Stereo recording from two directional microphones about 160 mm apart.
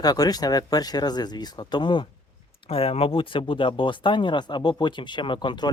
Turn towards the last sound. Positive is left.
turn(degrees=25)  # may be behind; listen again after turning